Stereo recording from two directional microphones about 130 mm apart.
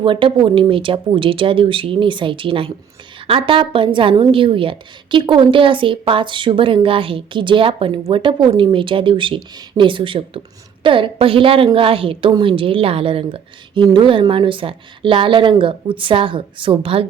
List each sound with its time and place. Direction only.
0.0 s a woman's voice: 40° right (ahead or behind)